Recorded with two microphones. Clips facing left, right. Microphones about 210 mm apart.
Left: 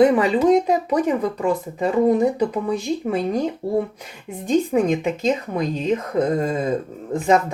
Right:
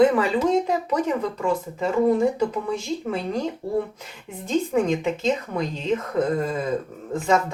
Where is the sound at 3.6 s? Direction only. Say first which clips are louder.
Left 3 dB; 35° left (ahead or behind).